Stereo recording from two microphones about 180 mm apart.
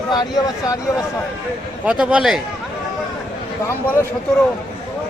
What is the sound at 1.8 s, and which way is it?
Speech, 5° right (ahead or behind).